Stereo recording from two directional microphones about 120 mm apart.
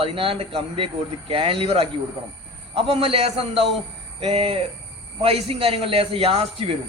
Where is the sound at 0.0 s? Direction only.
50° right (ahead or behind).